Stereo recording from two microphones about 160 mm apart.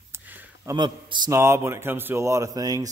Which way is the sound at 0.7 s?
25° right (ahead or behind).